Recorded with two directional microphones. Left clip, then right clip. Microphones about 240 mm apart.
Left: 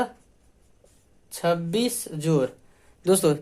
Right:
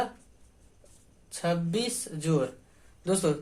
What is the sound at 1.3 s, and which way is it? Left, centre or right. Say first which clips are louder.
Speech: left 6 dB; left.